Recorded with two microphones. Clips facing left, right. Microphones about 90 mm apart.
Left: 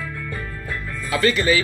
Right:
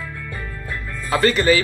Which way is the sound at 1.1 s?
35° right (ahead or behind).